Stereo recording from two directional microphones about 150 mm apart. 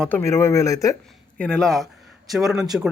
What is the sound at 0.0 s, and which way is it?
Speech, 15° left (ahead or behind).